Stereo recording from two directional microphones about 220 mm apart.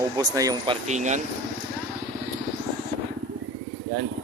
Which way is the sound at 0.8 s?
30° right (ahead or behind).